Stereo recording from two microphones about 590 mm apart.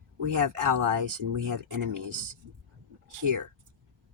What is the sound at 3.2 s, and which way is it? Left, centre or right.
Speech, right.